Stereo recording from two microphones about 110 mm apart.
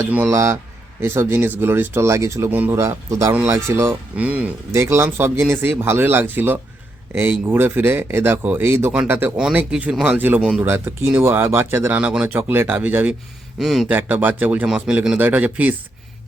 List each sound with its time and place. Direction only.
0.3 s speech: 30° right (ahead or behind)
2.7 s speech: 25° right (ahead or behind)
4.2 s speech: 15° right (ahead or behind)
4.7 s speech: 25° right (ahead or behind)
9.4 s speech: 10° right (ahead or behind)
13.6 s speech: 5° right (ahead or behind)
13.9 s speech: 15° right (ahead or behind)